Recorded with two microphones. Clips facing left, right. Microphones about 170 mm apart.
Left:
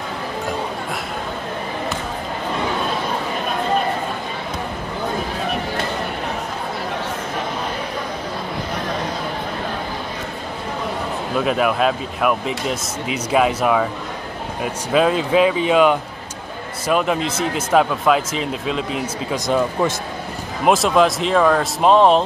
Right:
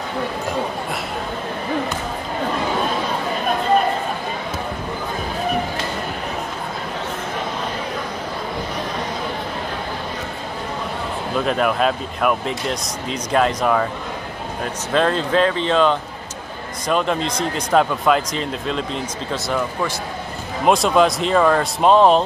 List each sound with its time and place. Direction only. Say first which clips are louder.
11.3 s speech: left 1 dB; 5° left (ahead or behind)
19.4 s speech: left 5 dB; 20° left (ahead or behind)
20.6 s speech: even; centre (ahead or behind)